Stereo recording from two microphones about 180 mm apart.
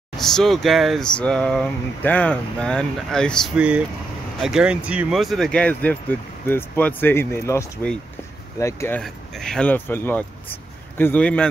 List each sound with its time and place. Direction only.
0.2 s speech: centre (ahead or behind)
9.0 s speech: centre (ahead or behind)